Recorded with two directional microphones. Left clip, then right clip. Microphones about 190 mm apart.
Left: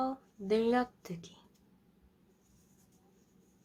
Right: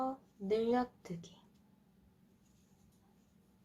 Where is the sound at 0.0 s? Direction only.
20° left (ahead or behind).